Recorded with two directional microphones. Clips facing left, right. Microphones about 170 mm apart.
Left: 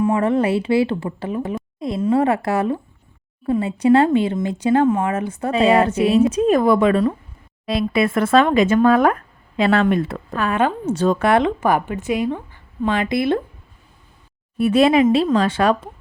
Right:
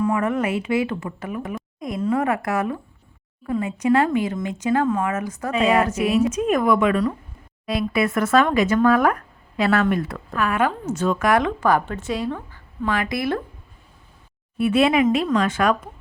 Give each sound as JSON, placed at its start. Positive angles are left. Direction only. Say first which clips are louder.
{"t": 0.0, "sound": "speech", "louder": "left 4 dB", "side_deg": 30}
{"t": 14.6, "sound": "speech", "louder": "left 3 dB", "side_deg": 40}